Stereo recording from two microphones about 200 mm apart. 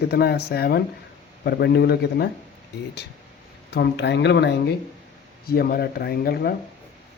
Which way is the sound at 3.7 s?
55° left (ahead or behind).